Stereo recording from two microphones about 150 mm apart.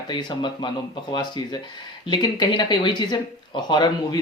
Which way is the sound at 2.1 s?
30° left (ahead or behind).